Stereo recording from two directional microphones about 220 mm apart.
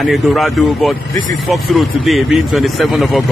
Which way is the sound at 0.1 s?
Centre (ahead or behind).